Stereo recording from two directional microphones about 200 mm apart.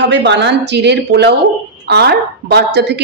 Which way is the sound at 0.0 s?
60° right (ahead or behind).